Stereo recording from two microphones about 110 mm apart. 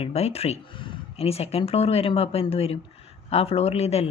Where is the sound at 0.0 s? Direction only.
70° left (ahead or behind).